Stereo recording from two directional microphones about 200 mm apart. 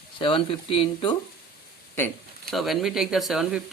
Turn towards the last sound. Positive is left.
turn(degrees=-5)  # may be behind; listen again after turning